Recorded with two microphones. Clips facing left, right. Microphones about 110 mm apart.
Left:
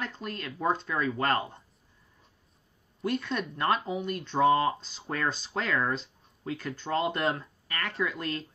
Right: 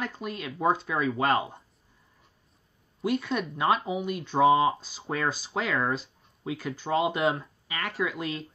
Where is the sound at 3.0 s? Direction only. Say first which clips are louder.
Right 3 dB; 5° right (ahead or behind).